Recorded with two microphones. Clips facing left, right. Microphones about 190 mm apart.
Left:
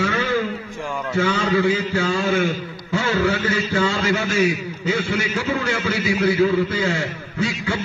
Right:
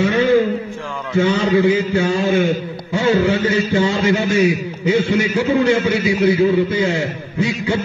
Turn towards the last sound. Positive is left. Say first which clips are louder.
# right 5 dB
turn(degrees=-20)  # may be behind; listen again after turning